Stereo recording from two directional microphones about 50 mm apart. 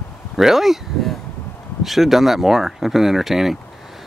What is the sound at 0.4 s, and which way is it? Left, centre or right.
Speech, centre.